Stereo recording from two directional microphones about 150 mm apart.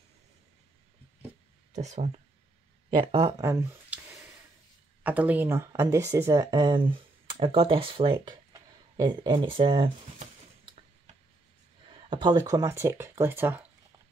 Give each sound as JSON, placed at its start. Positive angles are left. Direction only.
{"t": 1.7, "sound": "speech", "side_deg": -50}
{"t": 2.9, "sound": "speech", "side_deg": -30}
{"t": 5.0, "sound": "speech", "side_deg": -10}
{"t": 11.9, "sound": "speech", "side_deg": -30}